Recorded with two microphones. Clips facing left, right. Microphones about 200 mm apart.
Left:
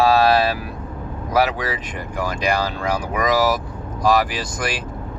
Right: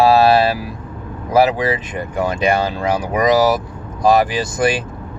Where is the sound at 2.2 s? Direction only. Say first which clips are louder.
Right 5 dB; 25° right (ahead or behind).